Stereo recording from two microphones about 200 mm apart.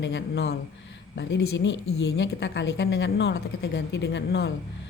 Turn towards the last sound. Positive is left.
turn(degrees=55)  # may be behind; listen again after turning